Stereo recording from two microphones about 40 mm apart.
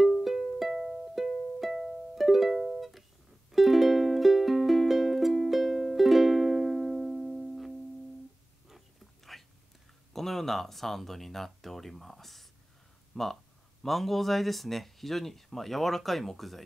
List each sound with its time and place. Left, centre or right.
0.2 s music: centre
2.5 s music: centre
3.5 s music: centre
8.6 s a sound: centre
10.1 s speech: centre